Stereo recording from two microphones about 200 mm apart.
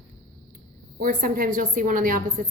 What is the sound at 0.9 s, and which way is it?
A woman's voice, 45° right (ahead or behind).